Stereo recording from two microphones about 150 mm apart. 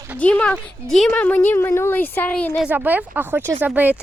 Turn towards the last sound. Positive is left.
turn(degrees=-10)  # may be behind; listen again after turning